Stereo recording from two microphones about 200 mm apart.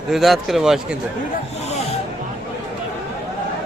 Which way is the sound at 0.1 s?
Centre (ahead or behind).